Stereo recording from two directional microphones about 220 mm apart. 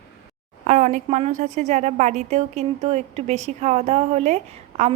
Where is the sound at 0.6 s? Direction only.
35° right (ahead or behind).